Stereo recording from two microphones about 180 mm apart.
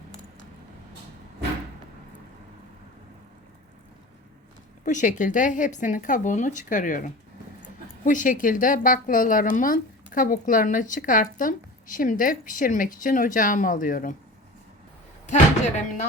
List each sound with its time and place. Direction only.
4.9 s a woman's voice: 45° left (ahead or behind)
15.3 s speech: 40° left (ahead or behind)